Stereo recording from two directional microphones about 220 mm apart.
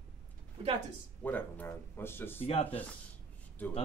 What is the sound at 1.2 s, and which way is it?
A man's voice, 10° left (ahead or behind).